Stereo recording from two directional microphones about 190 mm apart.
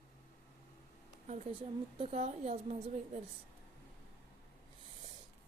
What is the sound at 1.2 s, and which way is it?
A woman's voice, 35° right (ahead or behind).